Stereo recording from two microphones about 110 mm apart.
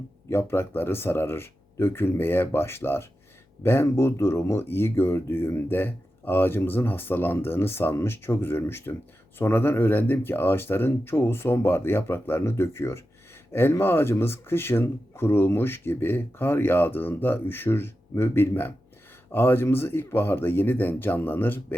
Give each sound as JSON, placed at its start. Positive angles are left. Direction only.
{"t": 0.3, "sound": "speech", "side_deg": 20}